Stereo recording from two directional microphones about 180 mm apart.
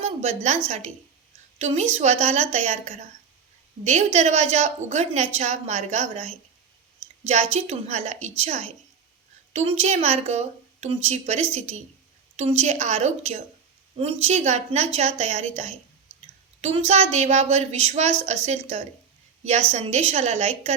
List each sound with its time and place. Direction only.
0.0 s a woman's voice: 40° right (ahead or behind)
7.5 s a woman's voice: 35° right (ahead or behind)